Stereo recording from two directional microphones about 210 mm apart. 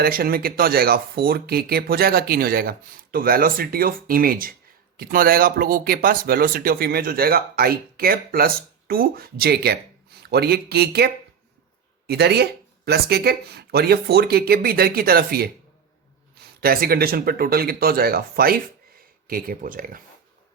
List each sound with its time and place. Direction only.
0.0 s speech: 45° right (ahead or behind)
16.6 s speech: 45° right (ahead or behind)